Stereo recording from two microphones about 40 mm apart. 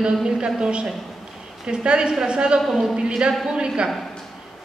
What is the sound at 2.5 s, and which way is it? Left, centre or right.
Speech, centre.